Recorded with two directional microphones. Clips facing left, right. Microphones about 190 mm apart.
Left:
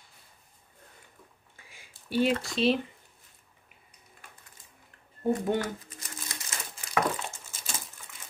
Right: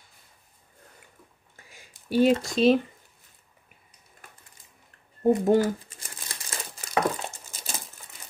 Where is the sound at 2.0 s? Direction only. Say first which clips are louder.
Right 6 dB; 40° right (ahead or behind).